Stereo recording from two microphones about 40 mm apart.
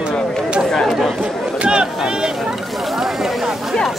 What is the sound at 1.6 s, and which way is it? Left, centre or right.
Speech, right.